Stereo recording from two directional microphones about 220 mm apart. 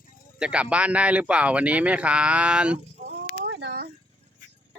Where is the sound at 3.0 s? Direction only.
40° right (ahead or behind).